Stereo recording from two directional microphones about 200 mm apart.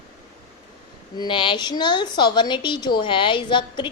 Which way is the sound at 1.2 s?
25° left (ahead or behind).